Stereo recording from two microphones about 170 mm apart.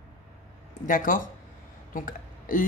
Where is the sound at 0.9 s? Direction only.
50° left (ahead or behind).